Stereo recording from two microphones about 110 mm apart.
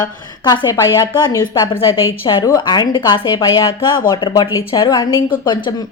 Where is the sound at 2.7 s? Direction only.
45° left (ahead or behind).